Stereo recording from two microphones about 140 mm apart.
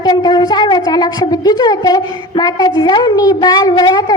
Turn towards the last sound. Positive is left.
turn(degrees=30)  # may be behind; listen again after turning